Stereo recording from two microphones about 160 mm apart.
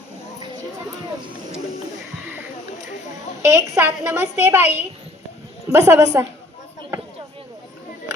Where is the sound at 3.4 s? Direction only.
20° right (ahead or behind).